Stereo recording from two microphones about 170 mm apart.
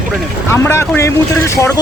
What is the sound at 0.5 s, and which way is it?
Speech, 15° left (ahead or behind).